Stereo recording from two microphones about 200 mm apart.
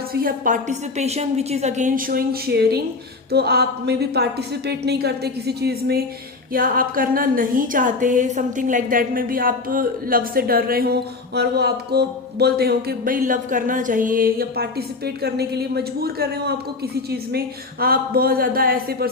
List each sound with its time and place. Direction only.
0.1 s music: 45° right (ahead or behind)
3.3 s a woman's voice: 55° right (ahead or behind)
6.5 s music: 45° right (ahead or behind)